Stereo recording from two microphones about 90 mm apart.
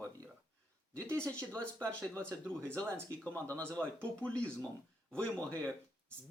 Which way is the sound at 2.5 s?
25° right (ahead or behind).